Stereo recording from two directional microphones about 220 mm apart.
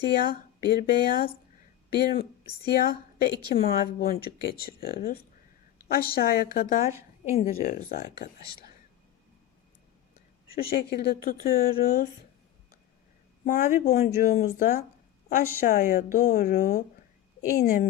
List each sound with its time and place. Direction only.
0.2 s a woman's voice: 45° left (ahead or behind)
10.5 s speech: 45° left (ahead or behind)
13.4 s a woman's voice: 40° left (ahead or behind)